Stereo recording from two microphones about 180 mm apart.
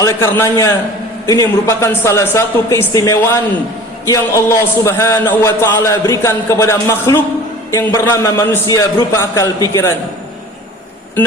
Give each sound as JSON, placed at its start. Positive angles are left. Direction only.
{"t": 0.0, "sound": "a man's voice", "side_deg": 15}